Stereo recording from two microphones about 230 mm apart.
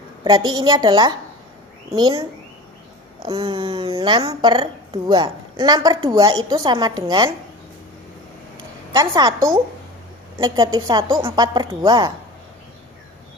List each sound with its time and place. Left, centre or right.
0.3 s a woman's voice: centre
3.2 s a woman's voice: right
8.5 s a sound: centre
10.3 s a woman's voice: centre